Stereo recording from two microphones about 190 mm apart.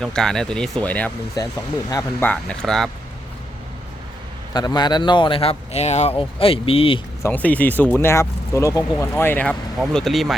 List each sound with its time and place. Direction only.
0.0 s speech: 5° left (ahead or behind)
1.4 s speech: 20° left (ahead or behind)
2.3 s speech: 5° left (ahead or behind)
4.5 s speech: 20° left (ahead or behind)
7.2 s speech: 10° left (ahead or behind)